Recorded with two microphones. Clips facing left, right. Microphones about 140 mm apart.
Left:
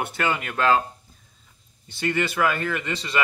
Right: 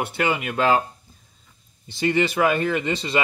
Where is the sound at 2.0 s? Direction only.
20° right (ahead or behind).